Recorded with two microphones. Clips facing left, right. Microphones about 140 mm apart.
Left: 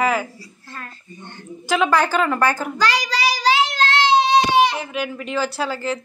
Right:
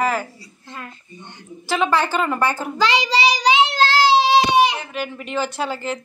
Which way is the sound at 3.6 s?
30° right (ahead or behind).